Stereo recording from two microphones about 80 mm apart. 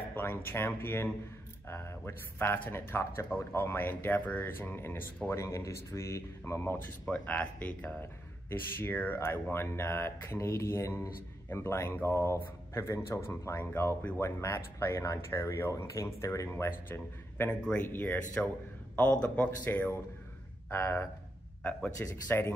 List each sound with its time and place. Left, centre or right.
0.1 s speech: left
5.3 s speech: left
7.1 s speech: centre
17.5 s speech: centre